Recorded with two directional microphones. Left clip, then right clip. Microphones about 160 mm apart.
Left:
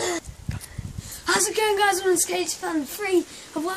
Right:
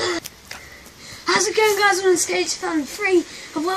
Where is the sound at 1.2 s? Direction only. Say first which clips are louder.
Right 5 dB; 10° left (ahead or behind).